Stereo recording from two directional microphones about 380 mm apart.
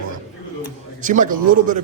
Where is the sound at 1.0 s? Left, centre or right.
Centre.